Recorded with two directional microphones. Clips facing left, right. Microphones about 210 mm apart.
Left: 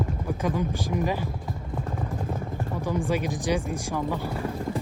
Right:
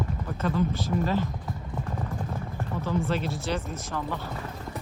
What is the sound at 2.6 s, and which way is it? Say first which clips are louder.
Speech: right 1 dB; 15° left (ahead or behind).